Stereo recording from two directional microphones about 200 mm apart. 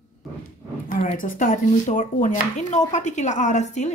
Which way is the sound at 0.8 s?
40° left (ahead or behind).